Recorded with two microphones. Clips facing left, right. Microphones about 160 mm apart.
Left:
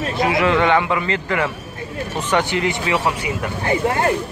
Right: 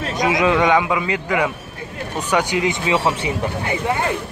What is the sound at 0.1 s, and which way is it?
A man's voice, 15° right (ahead or behind).